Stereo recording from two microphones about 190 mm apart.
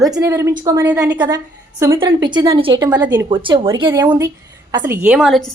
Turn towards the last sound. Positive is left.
turn(degrees=0)  # may be behind; listen again after turning